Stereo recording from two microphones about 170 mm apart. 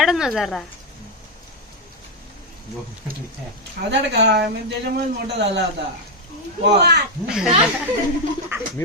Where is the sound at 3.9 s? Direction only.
90° right.